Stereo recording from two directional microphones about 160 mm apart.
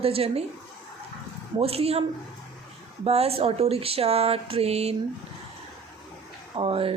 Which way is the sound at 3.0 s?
40° right (ahead or behind).